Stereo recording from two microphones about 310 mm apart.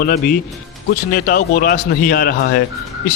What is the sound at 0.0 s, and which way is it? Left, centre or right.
Speech, left.